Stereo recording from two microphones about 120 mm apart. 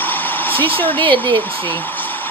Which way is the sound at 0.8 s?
15° left (ahead or behind).